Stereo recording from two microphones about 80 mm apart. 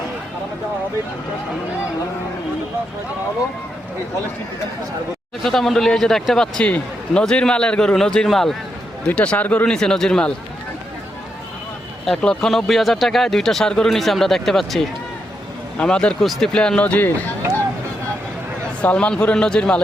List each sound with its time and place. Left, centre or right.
5.4 s speech: centre
9.0 s speech: centre
9.7 s speech: centre
12.0 s speech: centre
18.8 s speech: centre